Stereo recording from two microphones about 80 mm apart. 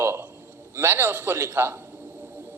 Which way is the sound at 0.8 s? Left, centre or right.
Right.